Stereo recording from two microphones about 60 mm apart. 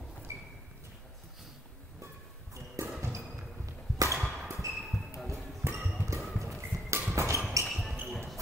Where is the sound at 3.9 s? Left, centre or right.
Right.